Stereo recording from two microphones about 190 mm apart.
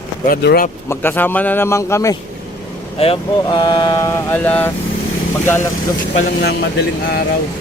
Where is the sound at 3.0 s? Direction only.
25° left (ahead or behind); by 4.7 s 5° left (ahead or behind).